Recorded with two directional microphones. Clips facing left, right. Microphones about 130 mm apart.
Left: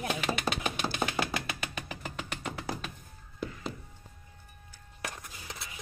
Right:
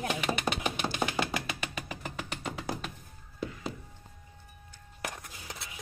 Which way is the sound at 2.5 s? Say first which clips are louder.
Right 1 dB; 20° right (ahead or behind).